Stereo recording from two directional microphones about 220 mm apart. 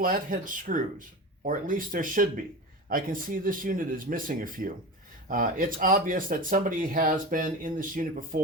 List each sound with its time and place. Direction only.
0.0 s speech: 40° right (ahead or behind)